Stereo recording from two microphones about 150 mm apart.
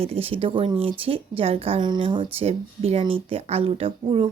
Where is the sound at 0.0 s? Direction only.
40° right (ahead or behind).